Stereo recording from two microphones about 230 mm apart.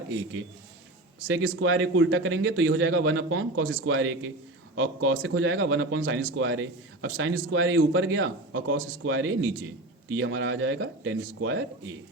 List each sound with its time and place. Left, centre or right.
1.6 s a man's voice: right